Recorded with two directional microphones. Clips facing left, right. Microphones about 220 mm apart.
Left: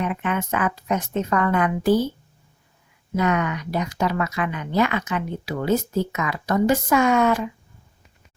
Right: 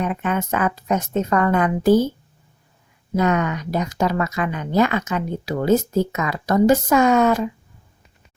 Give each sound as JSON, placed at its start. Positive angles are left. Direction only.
{"t": 0.0, "sound": "speech", "side_deg": -40}
{"t": 3.2, "sound": "speech", "side_deg": -40}